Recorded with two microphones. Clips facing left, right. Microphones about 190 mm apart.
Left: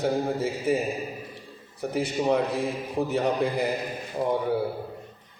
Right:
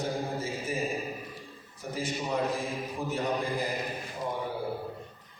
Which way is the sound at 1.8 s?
65° left (ahead or behind).